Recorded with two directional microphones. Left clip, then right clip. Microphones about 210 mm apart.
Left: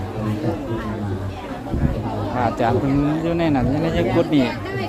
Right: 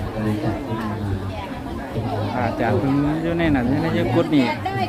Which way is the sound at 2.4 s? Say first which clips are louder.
Left 3 dB; 10° left (ahead or behind).